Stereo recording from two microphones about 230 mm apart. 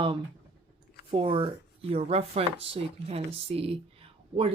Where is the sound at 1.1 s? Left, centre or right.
Right.